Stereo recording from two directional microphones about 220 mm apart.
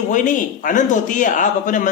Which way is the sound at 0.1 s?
35° left (ahead or behind).